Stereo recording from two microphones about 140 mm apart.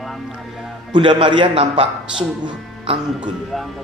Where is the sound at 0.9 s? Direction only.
35° right (ahead or behind).